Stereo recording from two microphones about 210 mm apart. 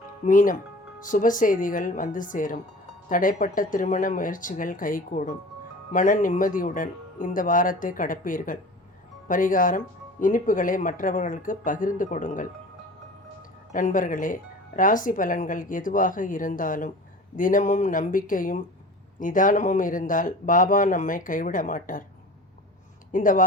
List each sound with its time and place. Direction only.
0.3 s speech: 40° left (ahead or behind)
13.7 s speech: 40° left (ahead or behind)
23.1 s speech: 40° left (ahead or behind)